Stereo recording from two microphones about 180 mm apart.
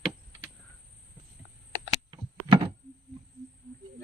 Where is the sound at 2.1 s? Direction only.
25° right (ahead or behind).